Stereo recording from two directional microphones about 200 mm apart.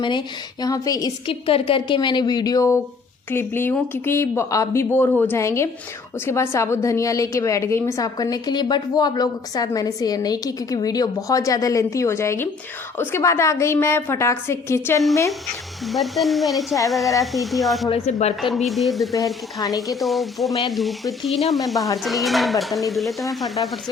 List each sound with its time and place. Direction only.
0.0 s a woman's voice: 25° left (ahead or behind)
15.9 s hair dryer: centre (ahead or behind)
17.9 s speech: 30° left (ahead or behind)
18.4 s hair dryer: centre (ahead or behind)
19.1 s a woman's voice: 15° left (ahead or behind)
20.0 s hair dryer: centre (ahead or behind)